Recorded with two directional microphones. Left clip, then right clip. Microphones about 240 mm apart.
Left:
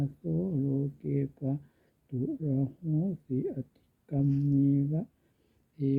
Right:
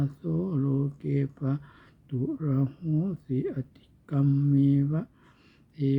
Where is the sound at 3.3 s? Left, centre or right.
Centre.